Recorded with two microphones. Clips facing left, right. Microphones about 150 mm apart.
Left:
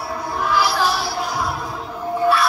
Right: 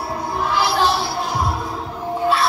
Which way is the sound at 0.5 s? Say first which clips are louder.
Right 1 dB; 25° right (ahead or behind).